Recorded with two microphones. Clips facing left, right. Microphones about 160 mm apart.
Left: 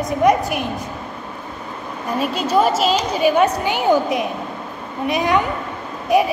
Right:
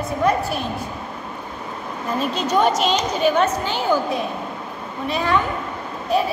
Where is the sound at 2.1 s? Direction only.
10° left (ahead or behind).